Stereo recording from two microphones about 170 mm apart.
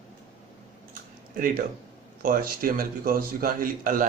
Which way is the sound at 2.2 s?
55° right (ahead or behind).